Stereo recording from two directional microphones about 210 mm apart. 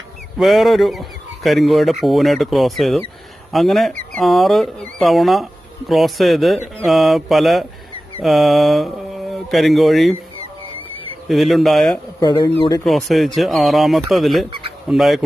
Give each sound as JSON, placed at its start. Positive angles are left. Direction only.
{"t": 0.3, "sound": "speech", "side_deg": 0}
{"t": 11.3, "sound": "speech", "side_deg": 0}
{"t": 12.2, "sound": "a man's voice", "side_deg": 20}
{"t": 12.8, "sound": "speech", "side_deg": 0}